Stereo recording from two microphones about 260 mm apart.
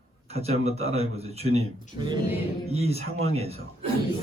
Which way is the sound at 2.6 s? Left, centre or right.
Right.